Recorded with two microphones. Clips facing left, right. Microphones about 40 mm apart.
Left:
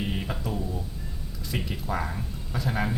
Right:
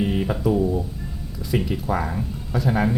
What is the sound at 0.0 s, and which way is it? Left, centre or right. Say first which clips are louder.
Speech: right 9 dB; centre.